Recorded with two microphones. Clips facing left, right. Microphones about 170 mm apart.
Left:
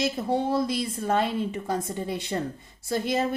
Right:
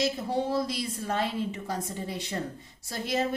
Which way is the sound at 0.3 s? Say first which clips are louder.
Left 3 dB; 55° left (ahead or behind).